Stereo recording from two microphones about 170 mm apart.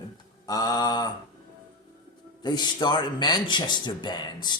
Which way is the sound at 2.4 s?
25° left (ahead or behind).